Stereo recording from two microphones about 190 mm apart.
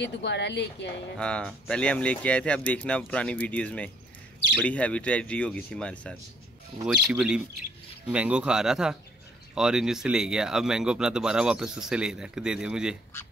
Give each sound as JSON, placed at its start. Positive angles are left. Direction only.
{"t": 0.0, "sound": "speech", "side_deg": 65}
{"t": 1.1, "sound": "speech", "side_deg": 5}